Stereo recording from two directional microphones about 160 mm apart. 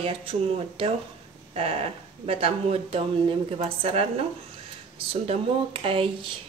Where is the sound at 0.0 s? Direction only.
35° right (ahead or behind).